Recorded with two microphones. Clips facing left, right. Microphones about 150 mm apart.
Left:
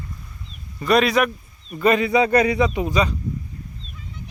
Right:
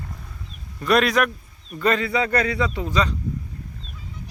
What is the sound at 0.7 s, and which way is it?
Speech, centre (ahead or behind).